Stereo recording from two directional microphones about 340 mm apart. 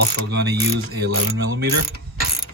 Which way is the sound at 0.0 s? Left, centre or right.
Right.